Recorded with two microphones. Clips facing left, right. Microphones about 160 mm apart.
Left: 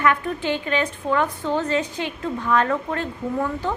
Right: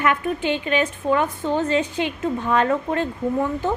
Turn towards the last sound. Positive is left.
turn(degrees=-20)  # may be behind; listen again after turning